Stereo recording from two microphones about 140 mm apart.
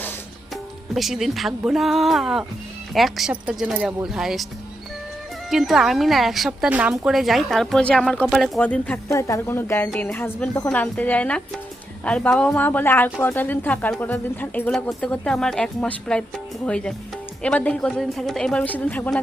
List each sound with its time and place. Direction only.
0.5 s a woman's voice: centre (ahead or behind)
5.5 s a woman's voice: centre (ahead or behind)
9.0 s a woman's voice: 20° left (ahead or behind)